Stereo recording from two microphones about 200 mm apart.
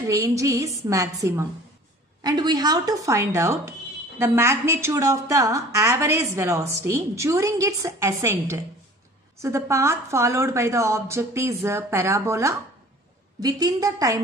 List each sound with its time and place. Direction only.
0.0 s a woman's voice: 15° right (ahead or behind)